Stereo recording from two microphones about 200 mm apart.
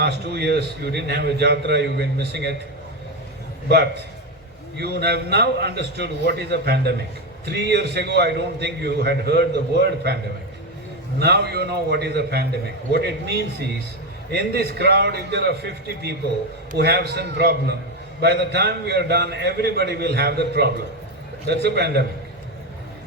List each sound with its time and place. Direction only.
0.0 s a man's voice: 55° right (ahead or behind)
3.7 s a man's voice: 55° right (ahead or behind)
11.2 s a man's voice: 55° right (ahead or behind)
14.3 s a man's voice: 55° right (ahead or behind)